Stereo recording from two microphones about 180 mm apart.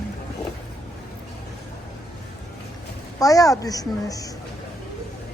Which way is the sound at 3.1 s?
20° left (ahead or behind).